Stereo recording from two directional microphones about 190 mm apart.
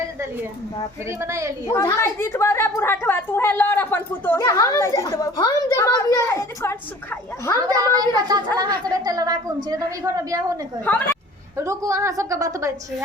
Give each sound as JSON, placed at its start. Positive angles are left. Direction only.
{"t": 1.2, "sound": "a woman's voice", "side_deg": -15}
{"t": 1.7, "sound": "a woman's voice", "side_deg": 15}
{"t": 7.8, "sound": "a woman's voice", "side_deg": -20}
{"t": 10.9, "sound": "a woman's voice", "side_deg": 10}
{"t": 11.5, "sound": "a woman's voice", "side_deg": -15}